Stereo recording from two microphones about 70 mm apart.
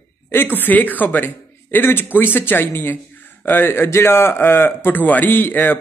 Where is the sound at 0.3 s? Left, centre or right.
Left.